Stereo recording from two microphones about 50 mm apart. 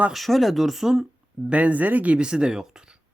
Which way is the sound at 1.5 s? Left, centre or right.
Right.